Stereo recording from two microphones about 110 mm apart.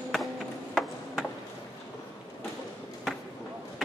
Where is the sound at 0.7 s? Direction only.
Centre (ahead or behind).